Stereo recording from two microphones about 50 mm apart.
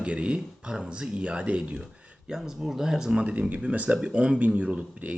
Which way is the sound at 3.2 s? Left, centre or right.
Right.